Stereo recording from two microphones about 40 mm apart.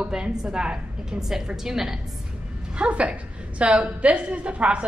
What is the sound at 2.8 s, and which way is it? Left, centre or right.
A woman's voice, right.